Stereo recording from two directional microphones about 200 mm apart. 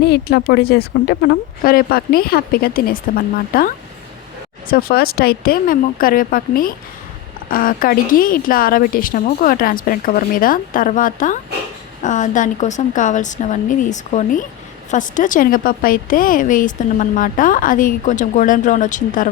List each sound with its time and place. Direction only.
0.0 s speech: 55° left (ahead or behind)
4.7 s a woman's voice: 50° left (ahead or behind)